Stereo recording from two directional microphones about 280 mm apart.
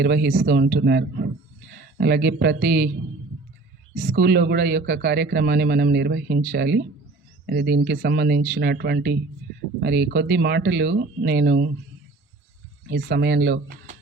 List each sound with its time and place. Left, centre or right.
0.0 s speech: right
3.9 s speech: right
12.9 s speech: right